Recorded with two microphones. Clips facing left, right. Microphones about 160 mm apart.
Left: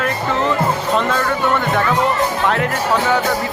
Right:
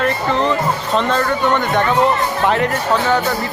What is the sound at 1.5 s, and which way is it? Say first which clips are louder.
Speech: right 1 dB; 5° left (ahead or behind).